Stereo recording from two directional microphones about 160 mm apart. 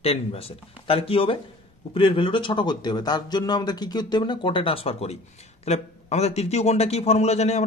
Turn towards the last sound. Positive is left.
turn(degrees=45)  # may be behind; listen again after turning